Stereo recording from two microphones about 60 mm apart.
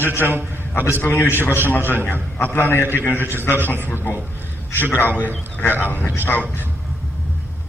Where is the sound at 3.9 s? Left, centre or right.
Left.